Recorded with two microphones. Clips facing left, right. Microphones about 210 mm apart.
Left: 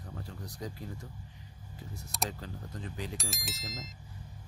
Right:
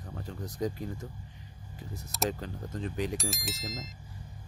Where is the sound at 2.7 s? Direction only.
20° right (ahead or behind).